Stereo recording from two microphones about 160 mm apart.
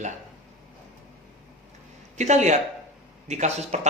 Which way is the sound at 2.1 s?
45° right (ahead or behind).